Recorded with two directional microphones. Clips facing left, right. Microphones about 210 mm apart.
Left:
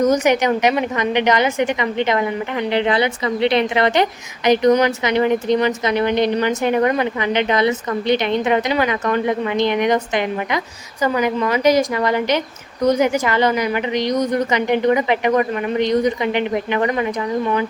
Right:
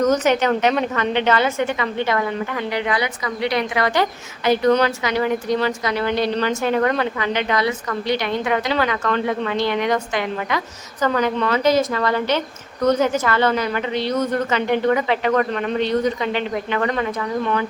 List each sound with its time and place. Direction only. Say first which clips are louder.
0.0 s a woman's voice: left 2 dB; 10° left (ahead or behind)